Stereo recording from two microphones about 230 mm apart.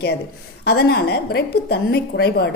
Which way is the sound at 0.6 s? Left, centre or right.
Left.